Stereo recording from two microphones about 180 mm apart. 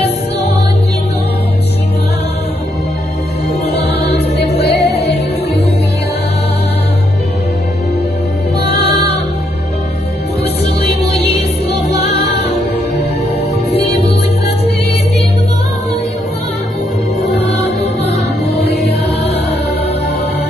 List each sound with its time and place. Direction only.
3.8 s music: 65° left (ahead or behind)
8.6 s music: 65° left (ahead or behind)
10.4 s music: 65° left (ahead or behind)
17.4 s music: 70° left (ahead or behind)